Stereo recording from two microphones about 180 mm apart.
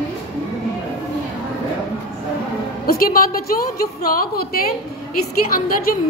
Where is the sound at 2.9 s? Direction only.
55° left (ahead or behind).